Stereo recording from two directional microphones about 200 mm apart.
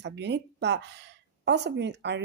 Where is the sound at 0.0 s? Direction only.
60° right (ahead or behind).